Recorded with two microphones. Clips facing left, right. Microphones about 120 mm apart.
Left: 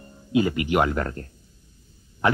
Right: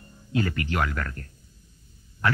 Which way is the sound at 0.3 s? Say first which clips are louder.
Left 6 dB; 15° left (ahead or behind).